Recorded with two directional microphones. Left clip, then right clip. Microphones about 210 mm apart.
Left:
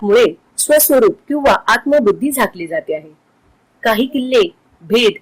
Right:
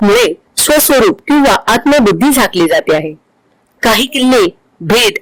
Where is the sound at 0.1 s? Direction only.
55° right (ahead or behind).